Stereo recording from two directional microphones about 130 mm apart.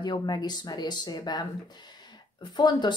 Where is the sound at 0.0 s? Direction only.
30° left (ahead or behind).